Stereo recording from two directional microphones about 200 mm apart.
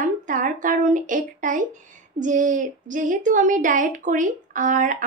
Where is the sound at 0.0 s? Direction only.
40° right (ahead or behind).